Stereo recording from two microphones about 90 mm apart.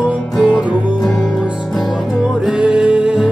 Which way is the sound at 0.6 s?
55° left (ahead or behind).